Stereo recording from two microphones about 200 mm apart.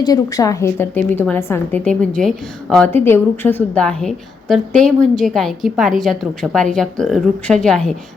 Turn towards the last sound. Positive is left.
turn(degrees=5)  # may be behind; listen again after turning